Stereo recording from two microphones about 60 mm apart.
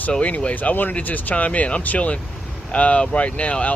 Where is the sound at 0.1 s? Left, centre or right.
Centre.